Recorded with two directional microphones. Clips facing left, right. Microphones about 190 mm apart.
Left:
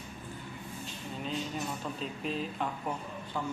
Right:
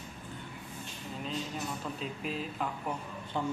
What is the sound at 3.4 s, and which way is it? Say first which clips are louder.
Speech: right 3 dB; 25° right (ahead or behind).